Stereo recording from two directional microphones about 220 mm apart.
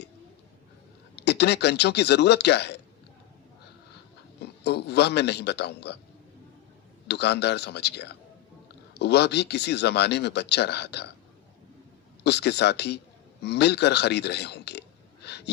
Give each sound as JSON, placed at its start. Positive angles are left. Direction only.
{"t": 1.1, "sound": "speech", "side_deg": 50}
{"t": 4.4, "sound": "a man's voice", "side_deg": 50}
{"t": 7.1, "sound": "speech", "side_deg": 50}
{"t": 12.2, "sound": "a man's voice", "side_deg": 50}